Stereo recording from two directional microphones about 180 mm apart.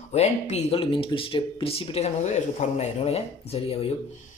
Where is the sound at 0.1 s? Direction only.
40° left (ahead or behind).